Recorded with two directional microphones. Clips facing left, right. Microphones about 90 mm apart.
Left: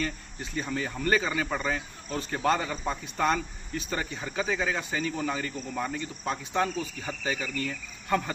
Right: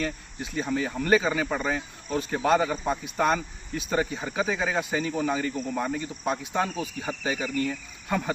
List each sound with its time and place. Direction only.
0.6 s speech: 10° right (ahead or behind)